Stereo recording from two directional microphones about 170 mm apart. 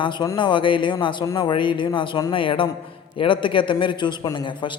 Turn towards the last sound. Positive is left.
turn(degrees=30)  # may be behind; listen again after turning